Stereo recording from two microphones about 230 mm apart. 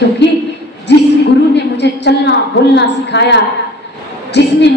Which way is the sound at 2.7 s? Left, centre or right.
Left.